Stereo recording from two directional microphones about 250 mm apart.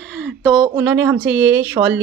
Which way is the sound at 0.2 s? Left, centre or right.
Centre.